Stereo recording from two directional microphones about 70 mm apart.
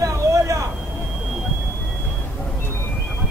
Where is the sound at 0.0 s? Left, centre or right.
Right.